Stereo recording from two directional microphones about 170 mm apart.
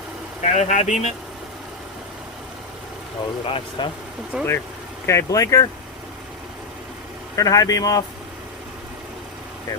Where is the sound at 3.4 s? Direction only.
35° left (ahead or behind).